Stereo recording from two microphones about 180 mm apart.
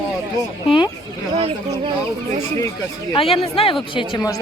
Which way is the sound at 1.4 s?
30° right (ahead or behind).